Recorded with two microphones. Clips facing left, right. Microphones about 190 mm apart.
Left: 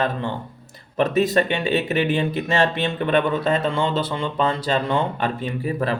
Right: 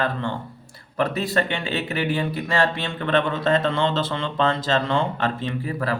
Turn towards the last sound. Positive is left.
turn(degrees=20)  # may be behind; listen again after turning